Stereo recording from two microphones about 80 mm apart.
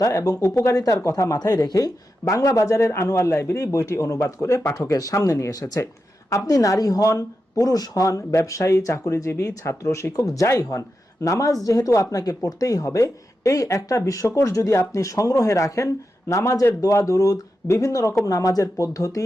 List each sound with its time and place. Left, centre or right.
0.0 s speech: left